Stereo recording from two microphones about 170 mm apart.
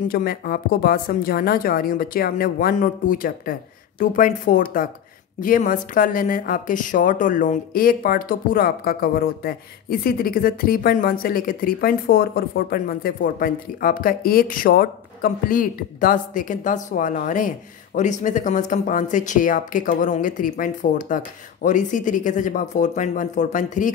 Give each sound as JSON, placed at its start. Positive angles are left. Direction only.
{"t": 0.1, "sound": "a woman's voice", "side_deg": 60}